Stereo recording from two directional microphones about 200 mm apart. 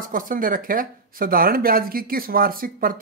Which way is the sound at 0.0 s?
45° right (ahead or behind).